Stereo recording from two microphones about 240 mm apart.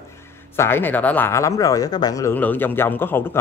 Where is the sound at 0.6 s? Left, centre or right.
Centre.